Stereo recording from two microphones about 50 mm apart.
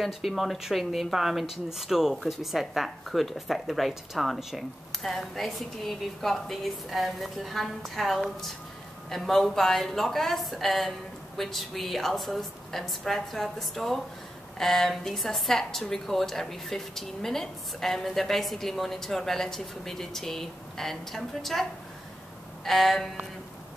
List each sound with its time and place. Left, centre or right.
0.0 s a woman's voice: centre
22.7 s a woman's voice: centre